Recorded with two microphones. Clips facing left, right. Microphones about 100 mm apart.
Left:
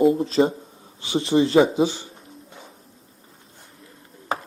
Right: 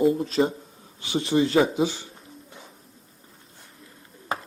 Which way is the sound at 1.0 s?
30° left (ahead or behind).